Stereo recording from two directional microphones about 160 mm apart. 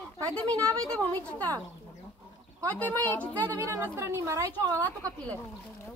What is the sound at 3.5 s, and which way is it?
Speech, 20° right (ahead or behind).